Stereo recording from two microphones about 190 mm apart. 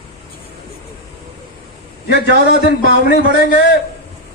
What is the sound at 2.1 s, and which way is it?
A man's voice, 55° left (ahead or behind).